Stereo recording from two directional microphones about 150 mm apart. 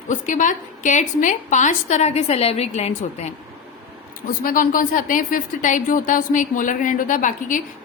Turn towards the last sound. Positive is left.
turn(degrees=60)  # may be behind; listen again after turning